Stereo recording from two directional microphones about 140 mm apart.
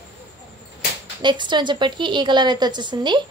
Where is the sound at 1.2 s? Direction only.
35° right (ahead or behind).